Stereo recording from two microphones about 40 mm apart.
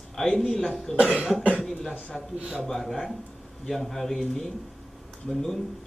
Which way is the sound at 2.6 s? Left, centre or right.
Centre.